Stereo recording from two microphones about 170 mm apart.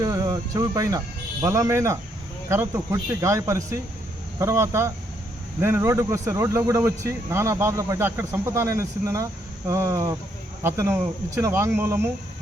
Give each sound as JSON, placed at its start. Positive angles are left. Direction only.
{"t": 0.0, "sound": "speech", "side_deg": -20}